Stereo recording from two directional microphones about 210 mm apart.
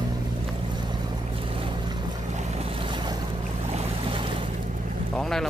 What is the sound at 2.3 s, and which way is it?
Boat, 30° right (ahead or behind).